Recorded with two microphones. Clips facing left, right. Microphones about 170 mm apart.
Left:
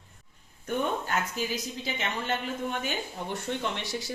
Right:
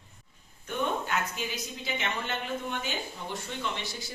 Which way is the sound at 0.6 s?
40° left (ahead or behind).